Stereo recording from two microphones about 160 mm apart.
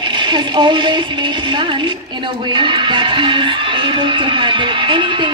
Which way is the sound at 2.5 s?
30° right (ahead or behind).